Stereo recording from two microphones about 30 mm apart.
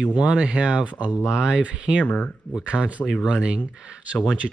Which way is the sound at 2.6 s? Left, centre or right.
Right.